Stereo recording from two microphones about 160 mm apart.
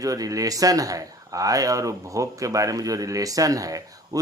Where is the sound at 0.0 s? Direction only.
20° right (ahead or behind).